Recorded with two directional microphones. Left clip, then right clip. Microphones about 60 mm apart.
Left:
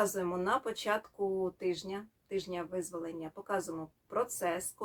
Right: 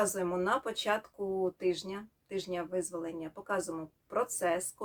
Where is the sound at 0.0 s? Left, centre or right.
Right.